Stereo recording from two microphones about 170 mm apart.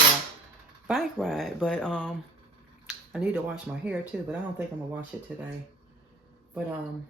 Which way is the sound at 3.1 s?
10° right (ahead or behind).